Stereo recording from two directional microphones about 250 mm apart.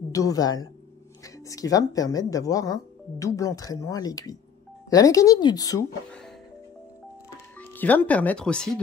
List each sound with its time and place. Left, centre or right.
0.1 s speech: centre
7.2 s speech: centre